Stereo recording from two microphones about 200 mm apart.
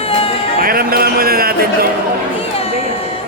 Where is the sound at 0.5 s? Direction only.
45° right (ahead or behind).